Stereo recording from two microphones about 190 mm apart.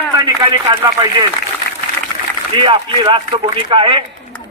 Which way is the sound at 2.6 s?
25° right (ahead or behind).